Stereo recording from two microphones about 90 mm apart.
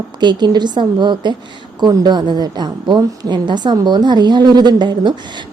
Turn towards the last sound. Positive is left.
turn(degrees=-55)  # may be behind; listen again after turning